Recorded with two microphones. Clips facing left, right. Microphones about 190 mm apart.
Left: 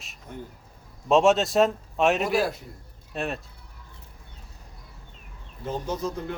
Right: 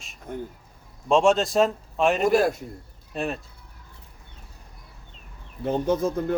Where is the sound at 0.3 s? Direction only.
50° right (ahead or behind).